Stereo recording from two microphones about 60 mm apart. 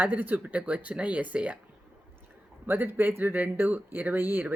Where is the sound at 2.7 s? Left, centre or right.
Right.